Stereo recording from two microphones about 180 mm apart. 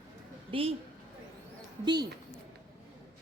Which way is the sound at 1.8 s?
25° right (ahead or behind).